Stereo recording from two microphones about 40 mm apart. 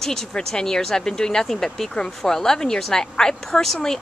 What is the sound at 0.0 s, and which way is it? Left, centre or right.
Speech, centre.